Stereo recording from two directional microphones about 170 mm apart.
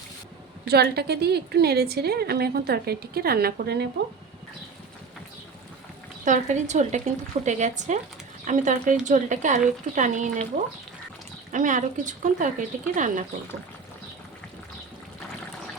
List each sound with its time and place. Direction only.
0.7 s a woman's voice: 70° right (ahead or behind)
6.2 s speech: 45° right (ahead or behind)
11.5 s speech: 50° right (ahead or behind)